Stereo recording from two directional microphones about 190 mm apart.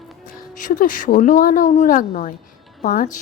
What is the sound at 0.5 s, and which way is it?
Speech, 45° left (ahead or behind).